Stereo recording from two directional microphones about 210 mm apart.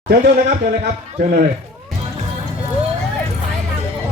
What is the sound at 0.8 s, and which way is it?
Speech, 50° right (ahead or behind).